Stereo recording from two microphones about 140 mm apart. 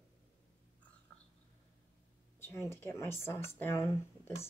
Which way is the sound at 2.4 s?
15° left (ahead or behind).